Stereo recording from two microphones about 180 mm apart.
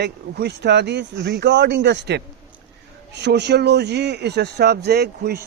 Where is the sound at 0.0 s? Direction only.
70° right (ahead or behind).